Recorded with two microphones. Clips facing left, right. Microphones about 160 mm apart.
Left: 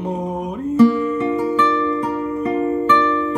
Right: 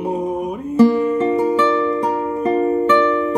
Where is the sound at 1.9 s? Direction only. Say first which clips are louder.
Right 2 dB; 15° right (ahead or behind).